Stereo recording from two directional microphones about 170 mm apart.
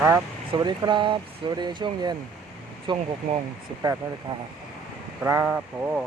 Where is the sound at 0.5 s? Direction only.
25° right (ahead or behind).